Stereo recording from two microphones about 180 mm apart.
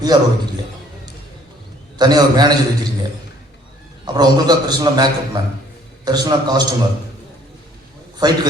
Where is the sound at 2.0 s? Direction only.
20° right (ahead or behind).